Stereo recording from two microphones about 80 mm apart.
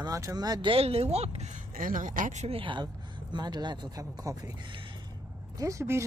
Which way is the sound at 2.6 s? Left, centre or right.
Right.